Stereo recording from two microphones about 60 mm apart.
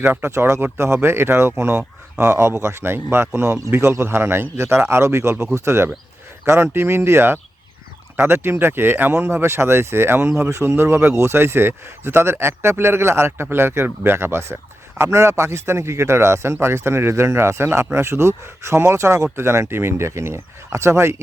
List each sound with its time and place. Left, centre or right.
0.0 s speech: right
0.3 s a man's voice: right